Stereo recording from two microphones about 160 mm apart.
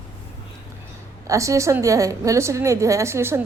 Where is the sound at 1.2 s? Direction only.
20° right (ahead or behind).